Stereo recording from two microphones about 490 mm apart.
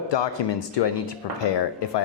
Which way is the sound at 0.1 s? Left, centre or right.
Left.